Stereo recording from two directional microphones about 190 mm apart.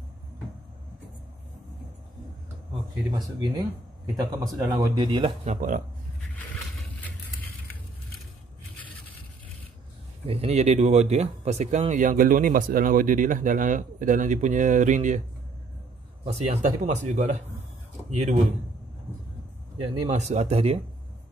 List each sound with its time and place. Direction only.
3.1 s speech: 20° right (ahead or behind)
5.4 s speech: 40° right (ahead or behind)
10.2 s speech: 30° right (ahead or behind)
16.3 s speech: 35° right (ahead or behind)
20.1 s speech: 35° right (ahead or behind)